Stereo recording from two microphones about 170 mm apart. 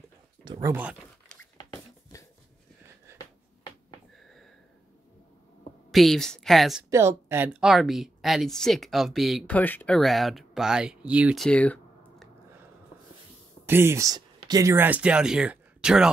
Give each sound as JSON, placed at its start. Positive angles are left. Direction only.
{"t": 0.5, "sound": "speech", "side_deg": -20}
{"t": 1.6, "sound": "a sound", "side_deg": 20}
{"t": 4.2, "sound": "sniff", "side_deg": 0}
{"t": 5.9, "sound": "a woman's voice", "side_deg": 0}
{"t": 6.9, "sound": "a woman's voice", "side_deg": -15}
{"t": 13.7, "sound": "speech", "side_deg": -15}